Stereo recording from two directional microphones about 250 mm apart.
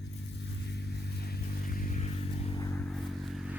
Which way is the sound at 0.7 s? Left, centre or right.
Left.